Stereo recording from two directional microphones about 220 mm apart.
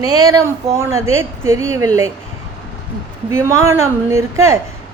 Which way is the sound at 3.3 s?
10° right (ahead or behind).